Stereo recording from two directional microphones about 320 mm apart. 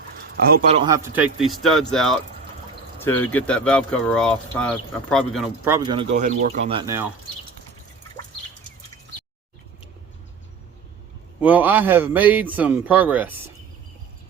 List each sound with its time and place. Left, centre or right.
0.3 s speech: right
0.8 s speech: centre
11.3 s speech: centre